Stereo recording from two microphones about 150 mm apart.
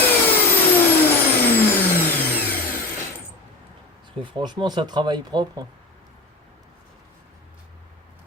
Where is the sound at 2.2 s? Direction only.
10° left (ahead or behind).